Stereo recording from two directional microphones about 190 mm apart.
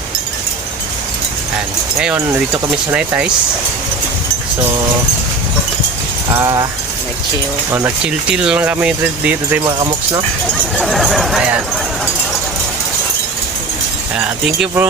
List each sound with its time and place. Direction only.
6.3 s speech: 15° right (ahead or behind)
7.7 s speech: 15° right (ahead or behind)
9.6 s speech: 25° right (ahead or behind)
10.8 s speech: centre (ahead or behind)
14.2 s speech: 10° right (ahead or behind)